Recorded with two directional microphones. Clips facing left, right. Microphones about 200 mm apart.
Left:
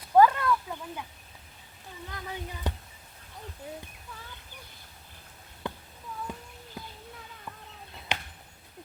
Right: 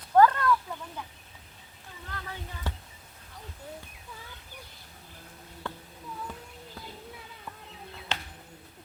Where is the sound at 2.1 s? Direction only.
15° left (ahead or behind).